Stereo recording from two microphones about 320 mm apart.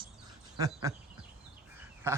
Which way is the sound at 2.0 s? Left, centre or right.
Centre.